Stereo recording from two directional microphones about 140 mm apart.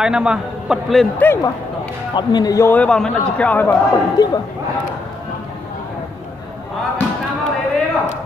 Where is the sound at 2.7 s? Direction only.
5° left (ahead or behind).